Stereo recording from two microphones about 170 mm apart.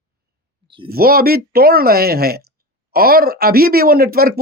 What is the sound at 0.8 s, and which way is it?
Speech, 60° right (ahead or behind).